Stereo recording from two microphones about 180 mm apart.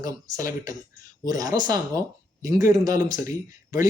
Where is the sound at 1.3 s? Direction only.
20° right (ahead or behind).